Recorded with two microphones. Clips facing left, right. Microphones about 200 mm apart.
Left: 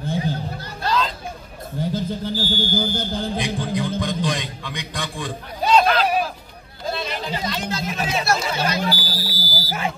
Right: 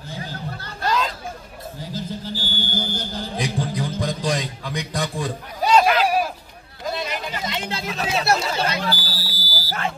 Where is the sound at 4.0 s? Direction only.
40° right (ahead or behind).